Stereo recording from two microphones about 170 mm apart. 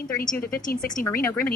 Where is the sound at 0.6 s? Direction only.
55° left (ahead or behind).